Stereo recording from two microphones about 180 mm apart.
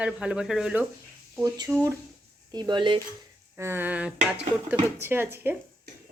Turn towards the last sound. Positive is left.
turn(degrees=-10)  # may be behind; listen again after turning